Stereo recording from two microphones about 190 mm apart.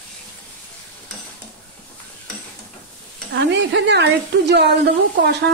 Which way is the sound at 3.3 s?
65° right (ahead or behind).